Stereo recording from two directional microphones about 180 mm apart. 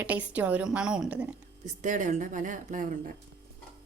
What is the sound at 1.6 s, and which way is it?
Speech, 45° right (ahead or behind).